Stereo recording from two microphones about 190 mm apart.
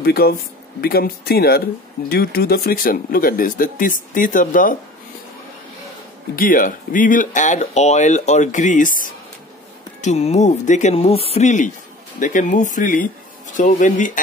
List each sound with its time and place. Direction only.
0.0 s speech: 55° left (ahead or behind)
6.3 s speech: 45° left (ahead or behind)